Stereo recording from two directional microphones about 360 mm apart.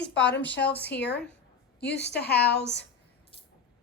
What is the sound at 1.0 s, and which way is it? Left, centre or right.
A woman's voice, left.